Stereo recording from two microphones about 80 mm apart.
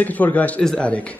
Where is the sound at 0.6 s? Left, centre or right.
Centre.